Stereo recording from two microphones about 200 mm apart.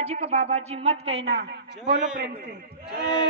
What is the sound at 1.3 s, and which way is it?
Speech, 55° right (ahead or behind).